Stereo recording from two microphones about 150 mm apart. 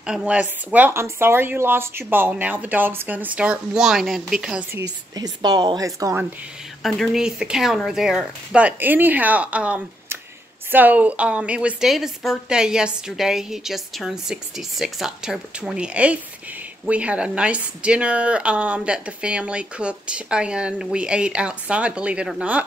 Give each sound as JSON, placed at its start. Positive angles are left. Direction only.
{"t": 0.0, "sound": "speech", "side_deg": -5}
{"t": 4.7, "sound": "speech", "side_deg": -25}
{"t": 6.8, "sound": "a woman's voice", "side_deg": 0}